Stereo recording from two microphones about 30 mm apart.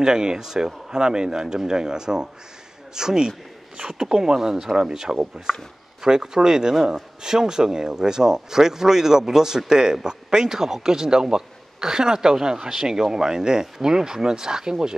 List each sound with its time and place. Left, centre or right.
0.0 s a man's voice: right